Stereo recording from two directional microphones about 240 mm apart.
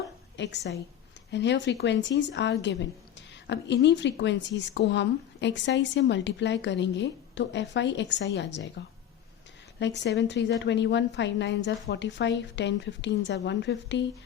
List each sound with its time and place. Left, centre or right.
0.3 s a woman's voice: left
9.8 s a woman's voice: left